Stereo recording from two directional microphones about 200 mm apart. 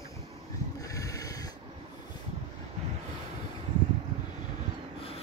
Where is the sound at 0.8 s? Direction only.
15° left (ahead or behind).